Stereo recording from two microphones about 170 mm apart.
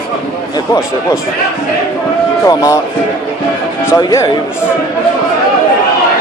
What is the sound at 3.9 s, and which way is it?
Speech, 20° left (ahead or behind).